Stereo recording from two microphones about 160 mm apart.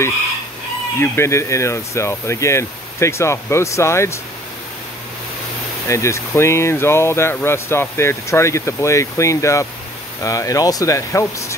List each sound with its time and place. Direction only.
0.9 s speech: 15° left (ahead or behind)
5.9 s speech: 15° left (ahead or behind)